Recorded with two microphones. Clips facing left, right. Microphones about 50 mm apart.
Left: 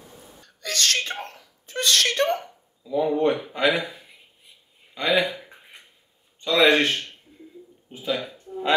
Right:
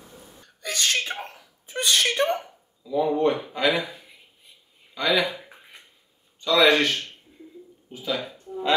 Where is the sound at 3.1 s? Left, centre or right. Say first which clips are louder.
Even; left.